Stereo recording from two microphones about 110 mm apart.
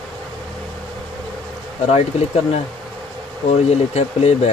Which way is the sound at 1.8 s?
75° left (ahead or behind).